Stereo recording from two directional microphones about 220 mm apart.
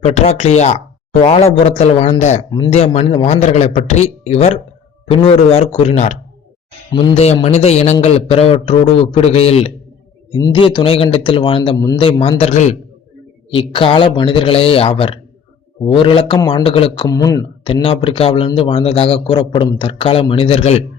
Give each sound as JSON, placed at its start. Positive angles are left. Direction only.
{"t": 0.0, "sound": "a man's voice", "side_deg": 30}
{"t": 2.5, "sound": "a man's voice", "side_deg": 20}